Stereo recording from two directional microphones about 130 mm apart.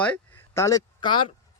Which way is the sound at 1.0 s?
40° left (ahead or behind).